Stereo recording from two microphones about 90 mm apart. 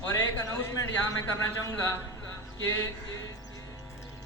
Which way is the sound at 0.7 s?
35° left (ahead or behind).